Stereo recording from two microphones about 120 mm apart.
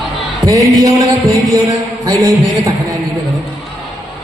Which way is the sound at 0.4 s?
30° right (ahead or behind).